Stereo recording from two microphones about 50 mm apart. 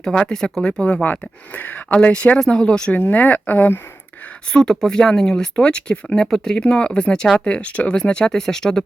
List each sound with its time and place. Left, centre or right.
0.0 s speech: left
1.0 s speech: left
2.6 s speech: centre
2.9 s speech: left
4.5 s speech: centre
6.3 s speech: centre
6.6 s speech: left